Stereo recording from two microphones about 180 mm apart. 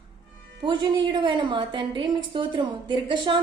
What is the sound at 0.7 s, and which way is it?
A woman's voice, 25° right (ahead or behind).